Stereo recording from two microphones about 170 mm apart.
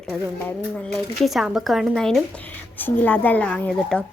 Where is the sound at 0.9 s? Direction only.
Centre (ahead or behind).